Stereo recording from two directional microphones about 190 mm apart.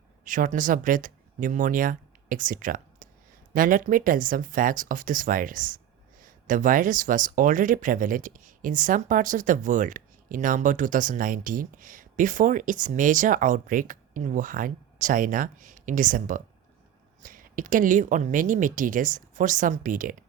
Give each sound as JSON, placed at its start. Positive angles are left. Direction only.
{"t": 0.3, "sound": "speech", "side_deg": -45}